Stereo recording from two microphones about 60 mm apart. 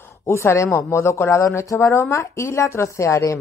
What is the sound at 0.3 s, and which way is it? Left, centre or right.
Speech, left.